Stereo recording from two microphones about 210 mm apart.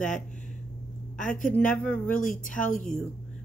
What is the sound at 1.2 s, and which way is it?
Speech, 40° left (ahead or behind).